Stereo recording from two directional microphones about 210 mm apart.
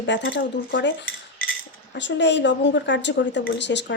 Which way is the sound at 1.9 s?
55° left (ahead or behind).